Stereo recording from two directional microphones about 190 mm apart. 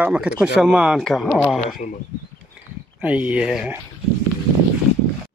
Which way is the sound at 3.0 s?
5° right (ahead or behind).